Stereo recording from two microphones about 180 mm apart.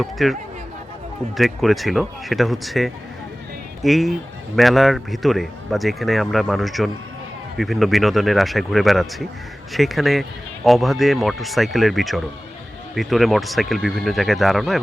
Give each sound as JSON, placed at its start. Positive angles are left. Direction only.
{"t": 0.0, "sound": "speech", "side_deg": 0}
{"t": 1.4, "sound": "speech", "side_deg": 0}